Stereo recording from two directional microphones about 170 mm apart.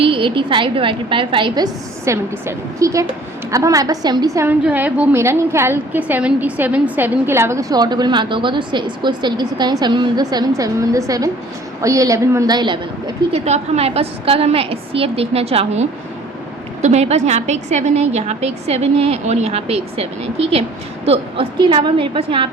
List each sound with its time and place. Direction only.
0.0 s a woman's voice: 30° right (ahead or behind)
4.4 s a woman's voice: 10° right (ahead or behind); by 22.4 s 30° right (ahead or behind)